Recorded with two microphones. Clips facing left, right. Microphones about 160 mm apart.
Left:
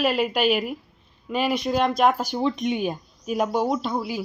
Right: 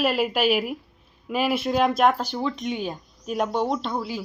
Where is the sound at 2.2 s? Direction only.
15° left (ahead or behind).